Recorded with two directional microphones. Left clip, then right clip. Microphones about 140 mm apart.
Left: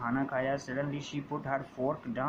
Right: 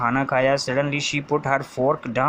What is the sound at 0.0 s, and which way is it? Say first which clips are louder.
Speech: right 12 dB; 35° right (ahead or behind).